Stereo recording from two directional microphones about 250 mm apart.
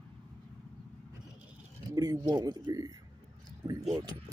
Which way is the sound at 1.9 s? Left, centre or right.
Centre.